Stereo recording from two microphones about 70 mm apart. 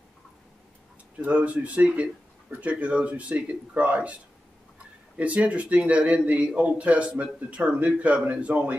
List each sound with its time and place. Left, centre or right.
1.2 s a man's voice: centre